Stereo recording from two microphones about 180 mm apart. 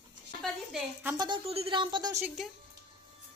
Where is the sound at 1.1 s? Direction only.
25° right (ahead or behind).